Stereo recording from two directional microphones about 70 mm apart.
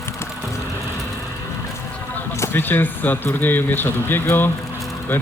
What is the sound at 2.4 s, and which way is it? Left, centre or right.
Speech, left.